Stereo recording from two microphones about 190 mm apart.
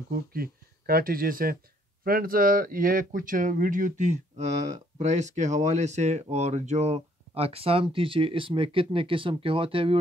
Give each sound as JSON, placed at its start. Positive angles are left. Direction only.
{"t": 0.1, "sound": "speech", "side_deg": -50}